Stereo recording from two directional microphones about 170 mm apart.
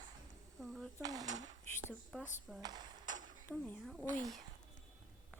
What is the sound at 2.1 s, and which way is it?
Speech, 5° left (ahead or behind).